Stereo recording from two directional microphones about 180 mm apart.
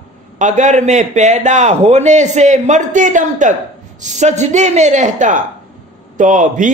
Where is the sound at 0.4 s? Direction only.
45° right (ahead or behind).